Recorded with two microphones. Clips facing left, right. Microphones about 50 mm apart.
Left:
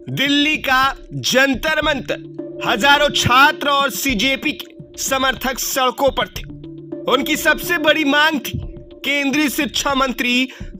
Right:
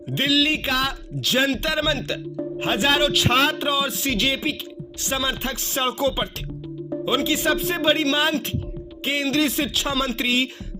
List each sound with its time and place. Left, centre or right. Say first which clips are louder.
0.1 s a man's voice: left 4 dB; left
1.5 s speech: left 6 dB; left
2.0 s speech: left 3 dB; left
7.2 s a man's voice: left 3 dB; left